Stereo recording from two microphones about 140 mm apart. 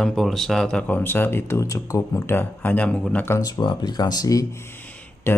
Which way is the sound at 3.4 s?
30° left (ahead or behind).